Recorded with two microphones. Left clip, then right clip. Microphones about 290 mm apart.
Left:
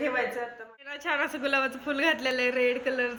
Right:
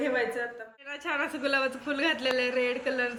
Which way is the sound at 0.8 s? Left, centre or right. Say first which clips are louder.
Left 2 dB; centre.